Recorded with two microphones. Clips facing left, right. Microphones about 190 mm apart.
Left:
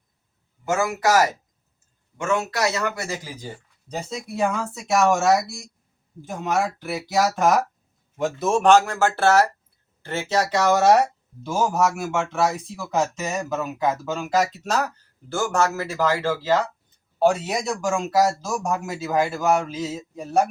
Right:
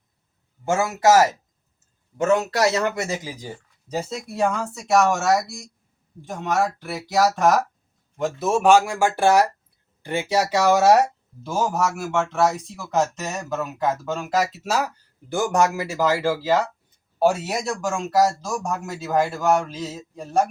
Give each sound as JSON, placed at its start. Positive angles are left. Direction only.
{"t": 0.7, "sound": "speech", "side_deg": -25}
{"t": 2.1, "sound": "a man's voice", "side_deg": -35}
{"t": 3.8, "sound": "speech", "side_deg": -5}